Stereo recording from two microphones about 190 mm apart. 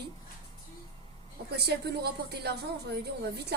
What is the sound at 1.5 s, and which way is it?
Speech, 60° right (ahead or behind).